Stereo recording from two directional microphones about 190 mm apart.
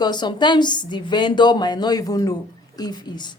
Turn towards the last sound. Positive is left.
turn(degrees=25)  # may be behind; listen again after turning